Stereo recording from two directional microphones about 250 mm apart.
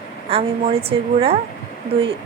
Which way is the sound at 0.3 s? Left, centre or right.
Right.